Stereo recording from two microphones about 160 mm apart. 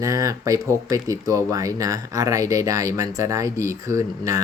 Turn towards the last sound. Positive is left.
turn(degrees=-20)  # may be behind; listen again after turning